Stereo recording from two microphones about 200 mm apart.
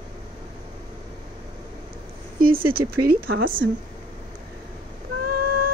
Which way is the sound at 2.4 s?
45° right (ahead or behind).